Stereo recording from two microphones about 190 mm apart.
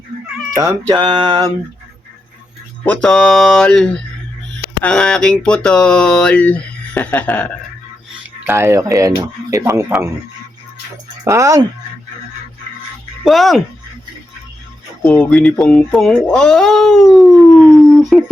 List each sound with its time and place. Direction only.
0.5 s a sound: 15° right (ahead or behind)
2.8 s speech: 5° left (ahead or behind)
8.4 s speech: 15° right (ahead or behind)
11.3 s speech: 15° right (ahead or behind)
13.2 s speech: centre (ahead or behind)
15.0 s speech: 5° left (ahead or behind)